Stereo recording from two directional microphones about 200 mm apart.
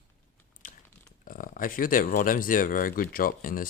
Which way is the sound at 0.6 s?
40° left (ahead or behind).